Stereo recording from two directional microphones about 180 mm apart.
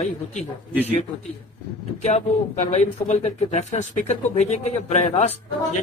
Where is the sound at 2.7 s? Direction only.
40° left (ahead or behind).